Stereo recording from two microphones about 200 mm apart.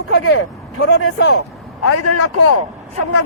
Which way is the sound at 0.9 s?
80° left.